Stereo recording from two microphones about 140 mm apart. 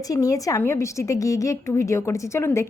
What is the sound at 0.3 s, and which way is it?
Speech, 25° left (ahead or behind).